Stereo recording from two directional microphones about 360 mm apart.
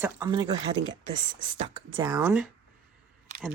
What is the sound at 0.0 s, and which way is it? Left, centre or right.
Speech, centre.